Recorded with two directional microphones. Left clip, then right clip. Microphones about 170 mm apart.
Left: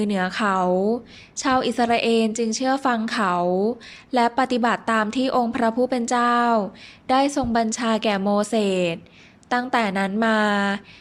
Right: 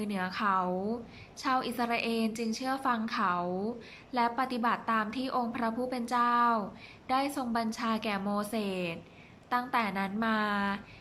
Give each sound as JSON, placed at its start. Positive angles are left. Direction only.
{"t": 0.0, "sound": "a woman's voice", "side_deg": 45}